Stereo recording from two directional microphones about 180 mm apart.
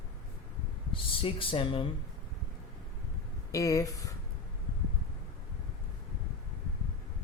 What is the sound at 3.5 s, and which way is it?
Speech, 15° left (ahead or behind).